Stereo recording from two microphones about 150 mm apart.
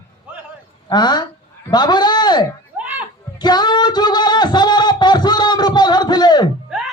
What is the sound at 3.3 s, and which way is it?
Music, 30° left (ahead or behind).